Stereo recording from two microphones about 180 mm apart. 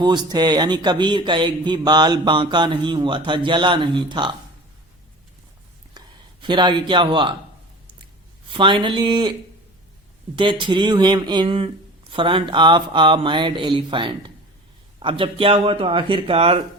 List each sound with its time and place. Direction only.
0.0 s a man's voice: 25° right (ahead or behind)
6.0 s a sound: 25° right (ahead or behind)
6.4 s a man's voice: 25° right (ahead or behind)
8.5 s a man's voice: 25° right (ahead or behind)
10.3 s a man's voice: 25° right (ahead or behind)